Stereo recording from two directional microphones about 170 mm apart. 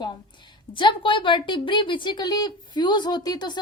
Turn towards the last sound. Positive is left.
turn(degrees=25)  # may be behind; listen again after turning